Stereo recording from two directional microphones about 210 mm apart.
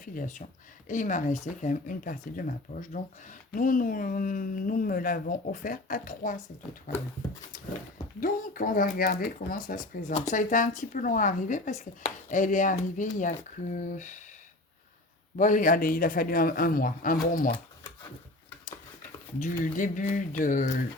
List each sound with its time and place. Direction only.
0.0 s speech: 40° left (ahead or behind)
8.2 s speech: 40° left (ahead or behind)
15.4 s a man's voice: 40° left (ahead or behind)
19.4 s speech: 40° left (ahead or behind)